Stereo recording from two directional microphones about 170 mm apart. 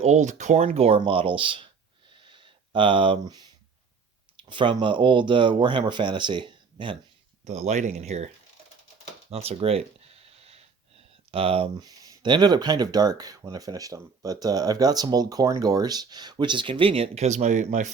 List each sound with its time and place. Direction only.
0.0 s speech: 45° right (ahead or behind)
2.1 s a sound: 30° right (ahead or behind)
4.4 s speech: 30° right (ahead or behind)
7.4 s speech: 40° right (ahead or behind)
9.3 s a sound: 35° right (ahead or behind)
11.3 s speech: 35° right (ahead or behind)